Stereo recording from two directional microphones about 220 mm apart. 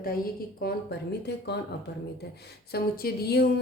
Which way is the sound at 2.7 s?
45° left (ahead or behind).